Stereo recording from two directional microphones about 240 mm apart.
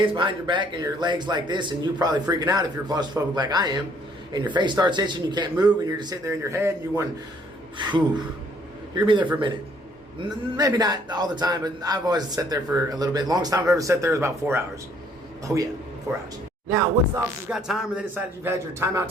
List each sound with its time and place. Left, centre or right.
0.0 s a man's voice: right
10.6 s a man's voice: centre
17.5 s a man's voice: centre